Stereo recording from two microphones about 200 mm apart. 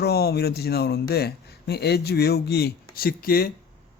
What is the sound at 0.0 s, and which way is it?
Speech, 50° left (ahead or behind).